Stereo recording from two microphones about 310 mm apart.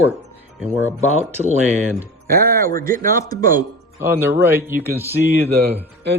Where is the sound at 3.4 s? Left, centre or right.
Centre.